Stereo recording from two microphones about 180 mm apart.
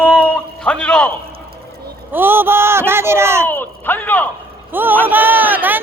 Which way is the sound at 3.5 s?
10° left (ahead or behind).